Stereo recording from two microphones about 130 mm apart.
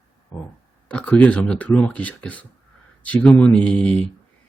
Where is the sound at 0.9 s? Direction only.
10° left (ahead or behind).